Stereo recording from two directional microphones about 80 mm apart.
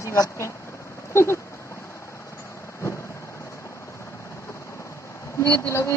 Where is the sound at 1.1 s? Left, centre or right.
Left.